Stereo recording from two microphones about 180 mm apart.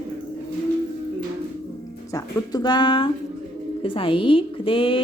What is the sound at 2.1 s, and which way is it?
A woman's voice, 20° left (ahead or behind).